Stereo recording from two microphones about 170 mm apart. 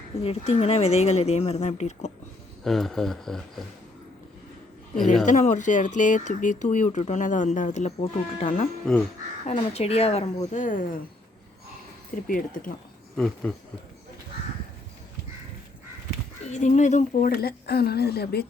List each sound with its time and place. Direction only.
0.2 s speech: 35° left (ahead or behind)
2.6 s speech: centre (ahead or behind)
5.2 s speech: 45° left (ahead or behind)
8.9 s speech: 5° left (ahead or behind)
9.5 s speech: 40° left (ahead or behind)
12.1 s speech: 55° left (ahead or behind)
13.1 s speech: 5° left (ahead or behind)
16.5 s speech: 45° left (ahead or behind); by 18.4 s 70° left (ahead or behind)